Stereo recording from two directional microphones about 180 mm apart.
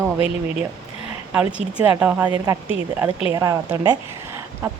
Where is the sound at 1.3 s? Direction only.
5° right (ahead or behind).